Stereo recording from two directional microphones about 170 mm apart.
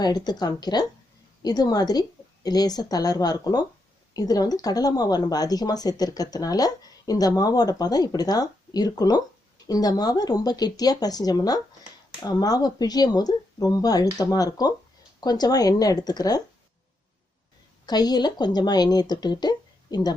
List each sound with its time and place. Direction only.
0.0 s speech: 25° left (ahead or behind)
17.8 s speech: 25° left (ahead or behind)